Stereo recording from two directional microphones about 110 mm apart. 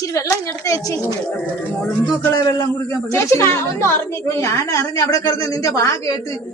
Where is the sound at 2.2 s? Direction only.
30° left (ahead or behind).